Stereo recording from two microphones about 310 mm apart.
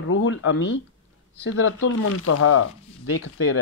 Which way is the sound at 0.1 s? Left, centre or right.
Left.